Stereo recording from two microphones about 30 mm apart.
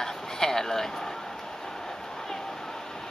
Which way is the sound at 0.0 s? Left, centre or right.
Centre.